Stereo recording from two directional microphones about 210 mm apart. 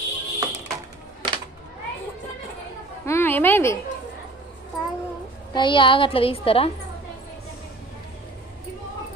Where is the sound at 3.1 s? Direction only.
10° left (ahead or behind).